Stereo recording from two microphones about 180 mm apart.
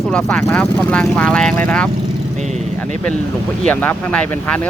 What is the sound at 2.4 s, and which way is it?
Speech, 40° right (ahead or behind).